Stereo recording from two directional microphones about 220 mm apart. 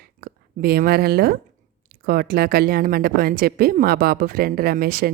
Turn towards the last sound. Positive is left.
turn(degrees=-40)  # may be behind; listen again after turning